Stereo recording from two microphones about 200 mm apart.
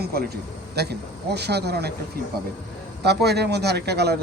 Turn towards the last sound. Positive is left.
turn(degrees=-55)  # may be behind; listen again after turning